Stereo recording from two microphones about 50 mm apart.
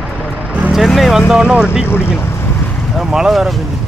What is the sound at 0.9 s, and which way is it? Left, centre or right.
Speech, centre.